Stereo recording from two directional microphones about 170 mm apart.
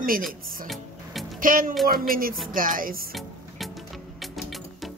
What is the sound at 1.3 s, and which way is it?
Speech, 55° right (ahead or behind).